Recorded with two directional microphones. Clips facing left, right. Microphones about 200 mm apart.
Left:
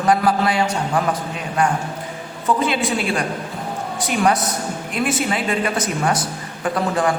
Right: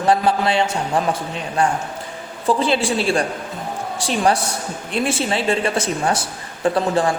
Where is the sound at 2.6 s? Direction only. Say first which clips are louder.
Right 1 dB; 30° right (ahead or behind).